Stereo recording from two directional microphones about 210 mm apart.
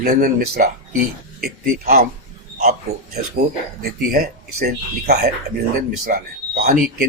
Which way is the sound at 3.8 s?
45° right (ahead or behind).